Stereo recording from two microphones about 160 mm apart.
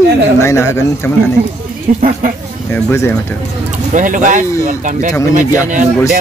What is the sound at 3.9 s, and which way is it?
Speech, 55° right (ahead or behind).